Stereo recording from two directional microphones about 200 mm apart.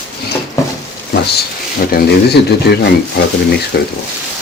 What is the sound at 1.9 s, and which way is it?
Speech, 55° left (ahead or behind).